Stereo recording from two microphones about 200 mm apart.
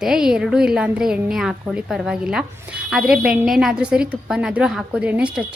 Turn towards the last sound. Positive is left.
turn(degrees=-5)  # may be behind; listen again after turning